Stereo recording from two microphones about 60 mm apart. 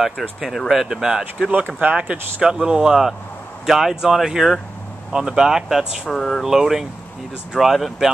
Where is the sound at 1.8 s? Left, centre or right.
Right.